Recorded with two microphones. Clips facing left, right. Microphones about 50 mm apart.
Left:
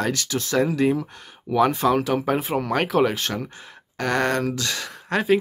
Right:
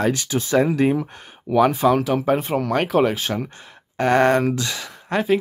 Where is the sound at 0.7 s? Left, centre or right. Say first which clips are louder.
Right 2 dB; right.